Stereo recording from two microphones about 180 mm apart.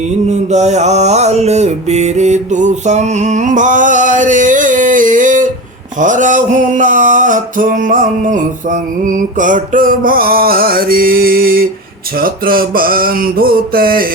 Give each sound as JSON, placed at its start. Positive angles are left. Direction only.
{"t": 0.3, "sound": "mantra", "side_deg": -40}
{"t": 6.0, "sound": "music", "side_deg": -45}